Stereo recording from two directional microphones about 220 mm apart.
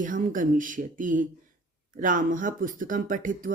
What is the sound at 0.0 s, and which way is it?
Speech, 35° right (ahead or behind).